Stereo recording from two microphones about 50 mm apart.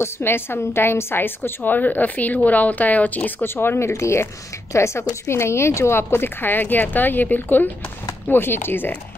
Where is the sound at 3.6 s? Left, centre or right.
Left.